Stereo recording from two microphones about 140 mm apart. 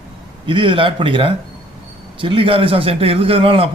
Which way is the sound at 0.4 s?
35° right (ahead or behind).